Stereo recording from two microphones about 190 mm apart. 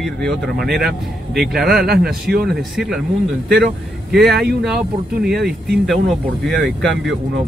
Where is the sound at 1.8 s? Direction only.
55° right (ahead or behind).